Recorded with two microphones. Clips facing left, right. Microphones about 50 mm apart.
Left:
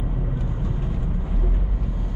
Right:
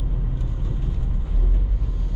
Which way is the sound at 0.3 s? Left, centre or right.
Left.